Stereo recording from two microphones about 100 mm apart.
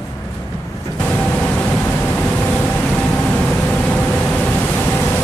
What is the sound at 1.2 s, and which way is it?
Vehicle, 10° left (ahead or behind).